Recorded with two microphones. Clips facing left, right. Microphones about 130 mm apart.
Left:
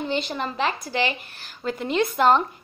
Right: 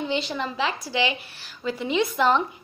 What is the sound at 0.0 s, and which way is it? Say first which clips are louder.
A woman's voice: even; 50° left (ahead or behind).